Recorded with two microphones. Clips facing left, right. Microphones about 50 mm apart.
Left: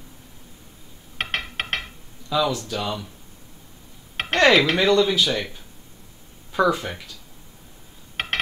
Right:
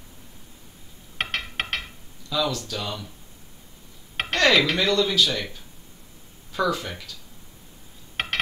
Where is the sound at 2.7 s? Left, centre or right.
Centre.